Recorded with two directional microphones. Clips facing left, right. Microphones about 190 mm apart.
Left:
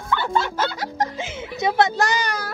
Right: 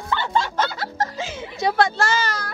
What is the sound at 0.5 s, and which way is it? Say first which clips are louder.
Speech: even; 10° left (ahead or behind).